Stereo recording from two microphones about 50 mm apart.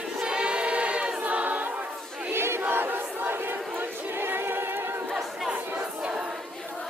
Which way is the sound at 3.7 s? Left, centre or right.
Right.